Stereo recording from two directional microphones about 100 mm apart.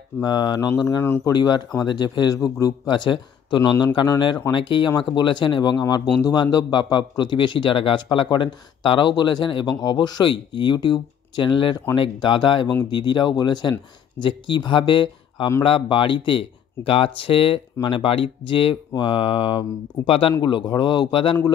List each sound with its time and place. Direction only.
0.2 s speech: 45° left (ahead or behind); by 20.3 s 60° left (ahead or behind)
20.4 s speech: 50° left (ahead or behind)